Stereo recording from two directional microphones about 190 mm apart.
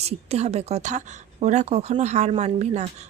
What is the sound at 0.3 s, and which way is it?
A woman's voice, 35° right (ahead or behind).